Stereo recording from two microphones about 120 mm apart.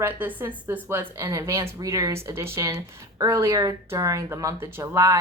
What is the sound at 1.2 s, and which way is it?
Speech, 30° right (ahead or behind).